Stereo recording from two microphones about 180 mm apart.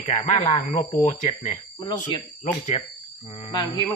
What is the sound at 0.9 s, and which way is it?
Speech, 40° left (ahead or behind).